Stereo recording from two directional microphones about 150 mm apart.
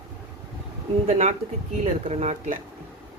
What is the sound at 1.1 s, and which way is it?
Speech, 45° right (ahead or behind).